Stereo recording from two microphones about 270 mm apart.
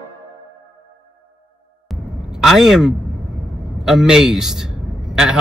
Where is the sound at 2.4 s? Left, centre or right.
Centre.